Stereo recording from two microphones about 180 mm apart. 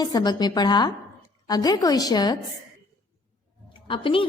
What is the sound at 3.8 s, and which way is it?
Speech, 30° left (ahead or behind).